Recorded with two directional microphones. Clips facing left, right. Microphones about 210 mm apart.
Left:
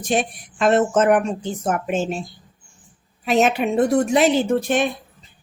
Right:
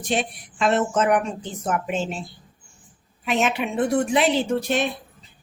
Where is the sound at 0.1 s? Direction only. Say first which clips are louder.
Left 3 dB; 45° left (ahead or behind).